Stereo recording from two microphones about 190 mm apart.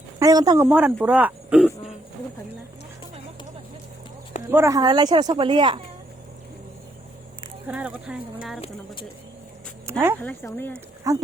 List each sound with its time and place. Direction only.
0.2 s speech: 20° right (ahead or behind)
0.7 s speech: 5° right (ahead or behind)
4.4 s speech: 15° right (ahead or behind)
7.7 s speech: 10° right (ahead or behind)
9.9 s speech: 15° right (ahead or behind)
10.2 s speech: 10° left (ahead or behind)
11.1 s speech: 15° right (ahead or behind)